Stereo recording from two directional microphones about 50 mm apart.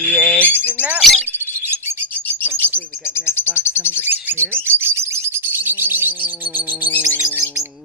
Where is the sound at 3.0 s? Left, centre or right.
Left.